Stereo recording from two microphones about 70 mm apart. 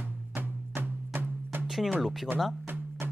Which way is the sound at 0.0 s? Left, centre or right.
Right.